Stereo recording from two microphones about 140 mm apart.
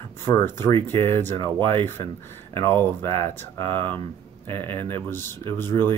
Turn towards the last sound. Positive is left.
turn(degrees=15)  # may be behind; listen again after turning